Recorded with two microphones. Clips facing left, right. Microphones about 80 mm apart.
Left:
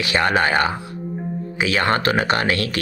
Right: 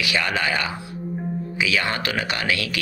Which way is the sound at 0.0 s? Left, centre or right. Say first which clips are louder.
Left 5 dB; left.